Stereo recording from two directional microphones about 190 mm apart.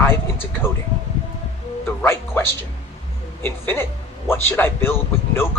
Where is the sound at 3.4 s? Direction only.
10° left (ahead or behind).